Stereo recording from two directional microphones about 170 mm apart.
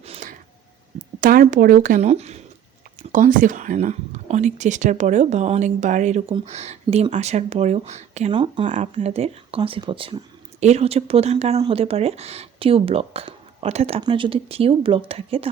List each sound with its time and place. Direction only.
0.0 s a sound: 35° right (ahead or behind)
0.9 s speech: 55° right (ahead or behind)
2.0 s speech: 40° right (ahead or behind)
8.3 s speech: 30° right (ahead or behind)
8.6 s speech: 45° right (ahead or behind)